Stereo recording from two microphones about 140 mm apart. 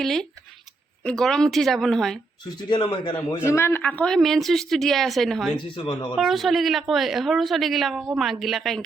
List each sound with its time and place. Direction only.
0.0 s a woman's voice: centre (ahead or behind)
2.6 s speech: 30° left (ahead or behind)
3.2 s a woman's voice: 15° left (ahead or behind); by 5.5 s centre (ahead or behind)
5.5 s speech: 35° left (ahead or behind)
6.1 s a woman's voice: centre (ahead or behind)